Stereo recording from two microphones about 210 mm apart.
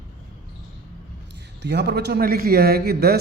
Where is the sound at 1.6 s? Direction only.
50° right (ahead or behind).